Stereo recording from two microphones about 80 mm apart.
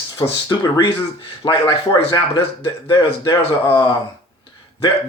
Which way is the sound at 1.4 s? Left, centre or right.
Left.